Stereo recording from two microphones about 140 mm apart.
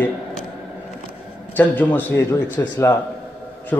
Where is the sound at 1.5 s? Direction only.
10° left (ahead or behind).